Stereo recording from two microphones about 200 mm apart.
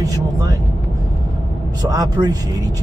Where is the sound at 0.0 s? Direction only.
20° right (ahead or behind).